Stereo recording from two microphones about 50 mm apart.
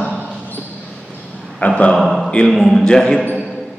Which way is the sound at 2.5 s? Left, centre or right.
Centre.